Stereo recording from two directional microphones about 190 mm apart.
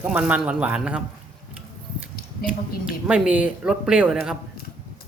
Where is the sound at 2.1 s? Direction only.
50° left (ahead or behind).